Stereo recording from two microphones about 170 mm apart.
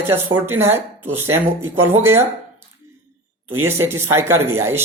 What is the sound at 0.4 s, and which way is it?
Speech, 15° right (ahead or behind).